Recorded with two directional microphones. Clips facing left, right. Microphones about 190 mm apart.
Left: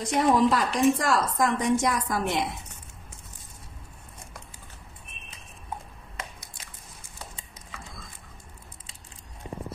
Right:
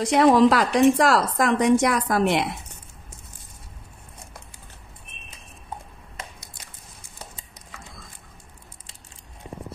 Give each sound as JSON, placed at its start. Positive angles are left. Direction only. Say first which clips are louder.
{"t": 0.0, "sound": "a woman's voice", "louder": "right 6 dB", "side_deg": -90}